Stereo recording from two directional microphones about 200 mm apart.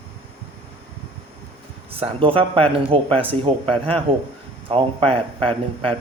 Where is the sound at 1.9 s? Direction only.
30° right (ahead or behind).